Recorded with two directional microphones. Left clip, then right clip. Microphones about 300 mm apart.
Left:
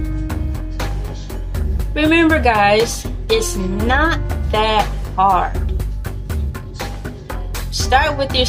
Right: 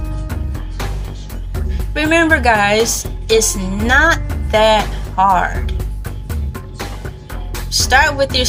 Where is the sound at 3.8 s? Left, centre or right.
Right.